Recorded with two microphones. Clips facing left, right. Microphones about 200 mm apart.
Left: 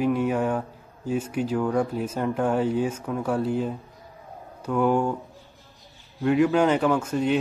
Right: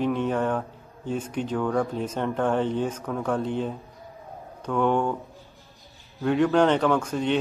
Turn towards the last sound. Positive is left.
turn(degrees=5)  # may be behind; listen again after turning